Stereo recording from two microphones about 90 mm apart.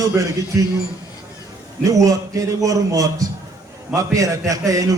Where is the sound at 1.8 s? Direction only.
35° right (ahead or behind).